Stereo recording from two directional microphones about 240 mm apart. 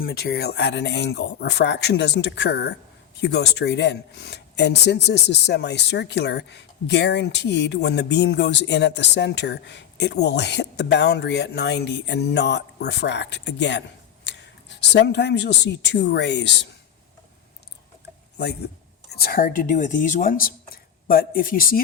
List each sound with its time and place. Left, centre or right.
0.0 s speech: left
19.1 s speech: left